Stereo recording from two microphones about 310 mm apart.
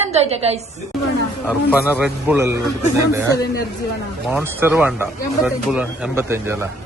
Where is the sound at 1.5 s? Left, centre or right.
Centre.